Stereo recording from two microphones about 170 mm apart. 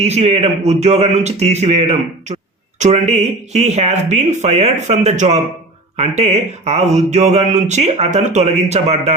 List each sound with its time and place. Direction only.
0.0 s speech: 40° right (ahead or behind)